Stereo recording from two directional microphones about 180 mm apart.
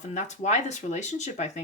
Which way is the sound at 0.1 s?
40° left (ahead or behind).